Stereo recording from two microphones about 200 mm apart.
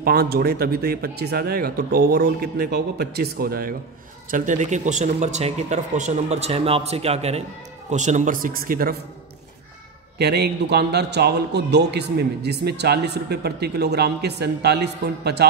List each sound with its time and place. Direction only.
0.0 s speech: 50° right (ahead or behind)
4.3 s speech: 40° right (ahead or behind)
10.1 s a man's voice: 55° right (ahead or behind)